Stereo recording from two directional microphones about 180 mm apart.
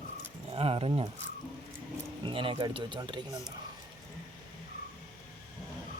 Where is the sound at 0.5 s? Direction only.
30° right (ahead or behind).